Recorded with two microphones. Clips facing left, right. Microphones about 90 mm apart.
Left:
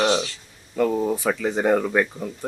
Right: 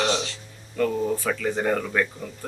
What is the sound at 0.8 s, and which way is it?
Speech, 15° left (ahead or behind).